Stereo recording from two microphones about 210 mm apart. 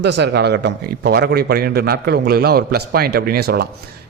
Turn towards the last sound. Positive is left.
turn(degrees=-45)  # may be behind; listen again after turning